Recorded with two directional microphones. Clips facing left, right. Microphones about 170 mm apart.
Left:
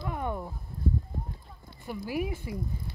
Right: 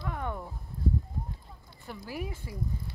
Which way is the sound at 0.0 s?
15° left (ahead or behind).